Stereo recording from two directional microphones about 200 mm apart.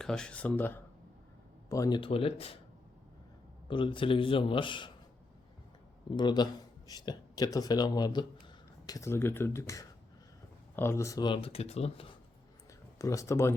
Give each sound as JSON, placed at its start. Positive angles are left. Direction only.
{"t": 0.0, "sound": "speech", "side_deg": 5}
{"t": 3.7, "sound": "speech", "side_deg": 25}
{"t": 6.1, "sound": "speech", "side_deg": 20}
{"t": 13.0, "sound": "speech", "side_deg": 15}